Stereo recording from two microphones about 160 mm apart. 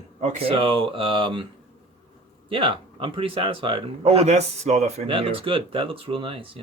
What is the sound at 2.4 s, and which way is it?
Speech, 35° right (ahead or behind).